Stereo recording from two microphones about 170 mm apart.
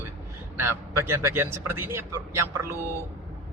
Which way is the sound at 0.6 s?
15° right (ahead or behind).